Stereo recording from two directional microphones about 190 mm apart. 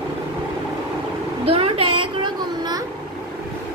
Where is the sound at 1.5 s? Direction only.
30° right (ahead or behind).